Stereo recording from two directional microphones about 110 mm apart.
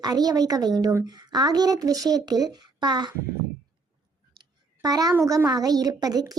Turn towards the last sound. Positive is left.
turn(degrees=-35)  # may be behind; listen again after turning